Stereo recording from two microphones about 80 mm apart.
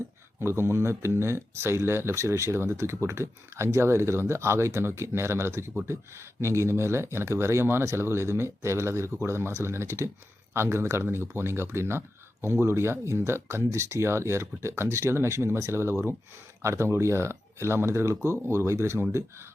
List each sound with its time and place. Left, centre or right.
0.3 s speech: right